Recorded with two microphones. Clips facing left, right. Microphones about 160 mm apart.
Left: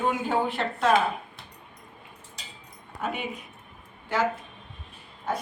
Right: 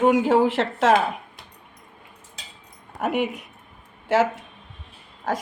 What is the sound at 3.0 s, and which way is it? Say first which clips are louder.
A woman's voice: right 8 dB; 75° right (ahead or behind).